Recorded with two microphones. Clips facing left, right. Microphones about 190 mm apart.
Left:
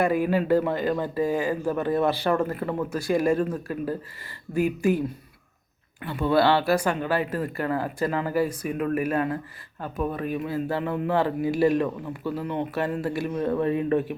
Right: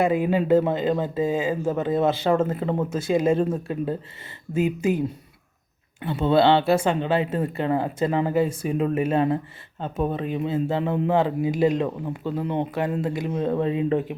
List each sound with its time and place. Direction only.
0.0 s speech: 20° right (ahead or behind)